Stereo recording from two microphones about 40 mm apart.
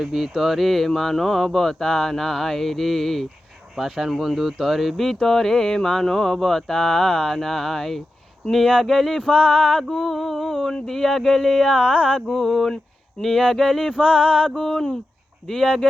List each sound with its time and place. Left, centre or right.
0.0 s speech: centre
9.3 s music: left
9.9 s speech: centre
11.7 s music: left
12.2 s speech: centre
14.0 s music: left
14.5 s speech: centre